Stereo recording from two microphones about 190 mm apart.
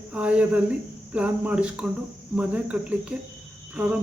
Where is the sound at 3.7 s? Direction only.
5° right (ahead or behind).